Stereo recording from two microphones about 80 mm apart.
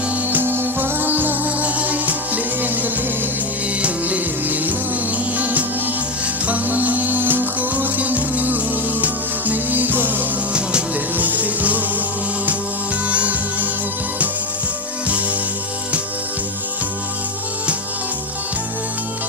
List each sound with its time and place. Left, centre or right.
0.3 s music: right
13.1 s music: centre
15.0 s music: centre